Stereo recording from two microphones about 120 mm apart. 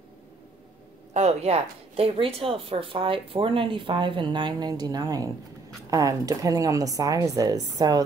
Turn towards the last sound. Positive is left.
turn(degrees=-30)  # may be behind; listen again after turning